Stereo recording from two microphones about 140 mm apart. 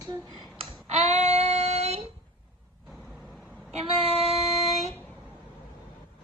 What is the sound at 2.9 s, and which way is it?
Vehicle, centre (ahead or behind).